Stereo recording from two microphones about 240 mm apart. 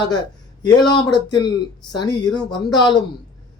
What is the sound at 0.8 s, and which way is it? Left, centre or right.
Speech, centre.